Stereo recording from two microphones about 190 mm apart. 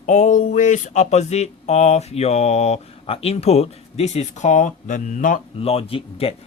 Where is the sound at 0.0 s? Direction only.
40° left (ahead or behind).